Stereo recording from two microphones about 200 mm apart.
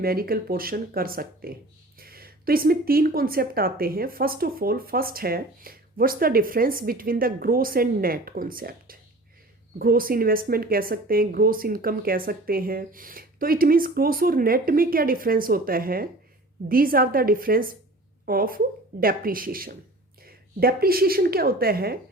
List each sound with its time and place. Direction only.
0.0 s speech: 50° right (ahead or behind)